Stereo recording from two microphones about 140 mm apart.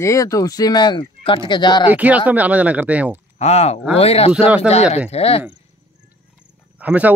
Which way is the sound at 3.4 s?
50° left (ahead or behind).